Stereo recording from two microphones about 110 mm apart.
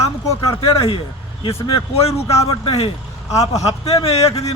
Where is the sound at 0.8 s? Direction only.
55° left (ahead or behind).